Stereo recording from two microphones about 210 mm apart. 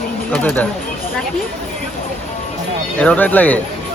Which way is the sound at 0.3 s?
5° left (ahead or behind).